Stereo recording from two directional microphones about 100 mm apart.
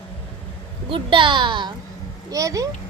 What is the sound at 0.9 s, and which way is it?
Speech, 55° right (ahead or behind).